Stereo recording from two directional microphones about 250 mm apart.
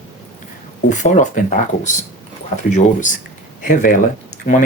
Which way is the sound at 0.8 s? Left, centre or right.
Left.